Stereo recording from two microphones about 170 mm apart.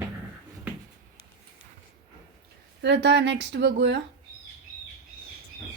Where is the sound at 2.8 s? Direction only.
90° right.